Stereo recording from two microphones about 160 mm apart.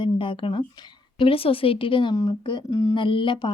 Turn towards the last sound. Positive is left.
turn(degrees=30)  # may be behind; listen again after turning